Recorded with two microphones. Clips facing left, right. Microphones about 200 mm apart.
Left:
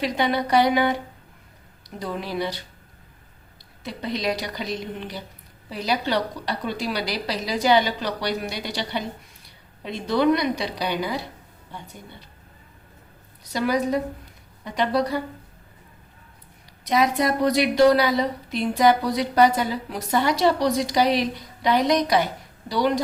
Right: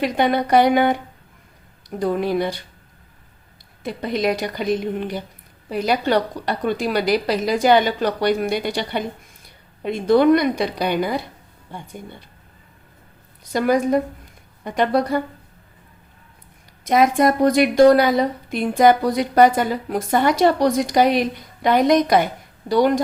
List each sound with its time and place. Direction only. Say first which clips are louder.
0.0 s a woman's voice: right 4 dB; 50° right (ahead or behind)
2.0 s a woman's voice: right 8 dB; 50° right (ahead or behind)
3.8 s a woman's voice: right 5 dB; 50° right (ahead or behind)
13.4 s a woman's voice: right 5 dB; 50° right (ahead or behind)
16.8 s a woman's voice: right 5 dB; 50° right (ahead or behind)